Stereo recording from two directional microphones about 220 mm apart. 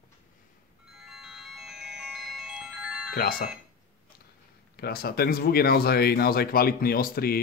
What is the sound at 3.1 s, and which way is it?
Speech, 45° left (ahead or behind).